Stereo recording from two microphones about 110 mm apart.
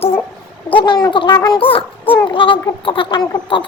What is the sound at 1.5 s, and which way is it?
A child's voice, 55° left (ahead or behind).